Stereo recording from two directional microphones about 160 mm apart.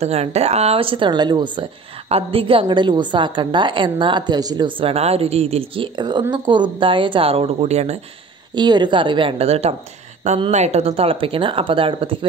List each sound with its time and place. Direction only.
0.0 s speech: 40° right (ahead or behind)
8.5 s speech: 30° right (ahead or behind)